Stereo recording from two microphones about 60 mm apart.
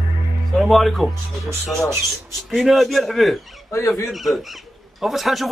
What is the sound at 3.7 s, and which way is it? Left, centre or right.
Speech, left.